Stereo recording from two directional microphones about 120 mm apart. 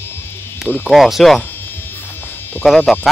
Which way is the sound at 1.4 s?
15° left (ahead or behind).